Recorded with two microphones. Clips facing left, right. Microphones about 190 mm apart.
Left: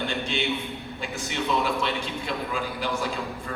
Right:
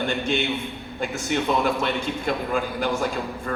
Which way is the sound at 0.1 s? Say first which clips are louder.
Right 4 dB; 50° right (ahead or behind).